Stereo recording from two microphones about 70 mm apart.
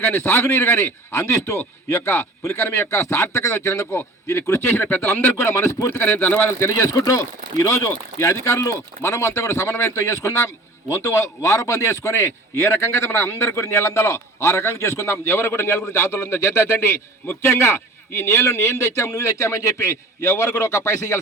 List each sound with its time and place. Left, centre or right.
0.0 s a man's voice: left
5.5 s speech: left
6.0 s a man's voice: left
6.4 s a man's voice: left
17.2 s speech: left